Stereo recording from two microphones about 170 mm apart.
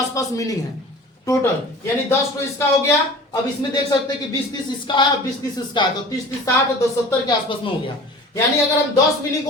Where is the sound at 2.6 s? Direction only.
15° left (ahead or behind).